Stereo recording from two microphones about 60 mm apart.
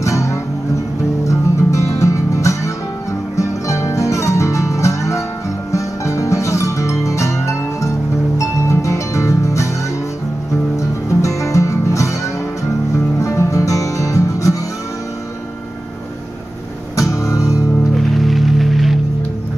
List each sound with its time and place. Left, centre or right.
0.0 s music: left
10.8 s music: left
16.9 s music: left
17.9 s music: centre